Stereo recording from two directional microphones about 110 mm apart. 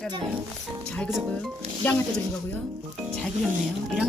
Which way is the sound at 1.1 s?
5° left (ahead or behind).